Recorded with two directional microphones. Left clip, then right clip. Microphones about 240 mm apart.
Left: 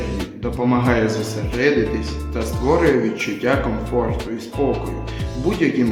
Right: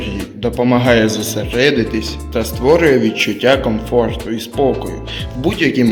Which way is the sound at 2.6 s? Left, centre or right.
Right.